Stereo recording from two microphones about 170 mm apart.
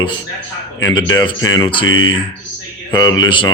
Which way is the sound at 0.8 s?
25° left (ahead or behind).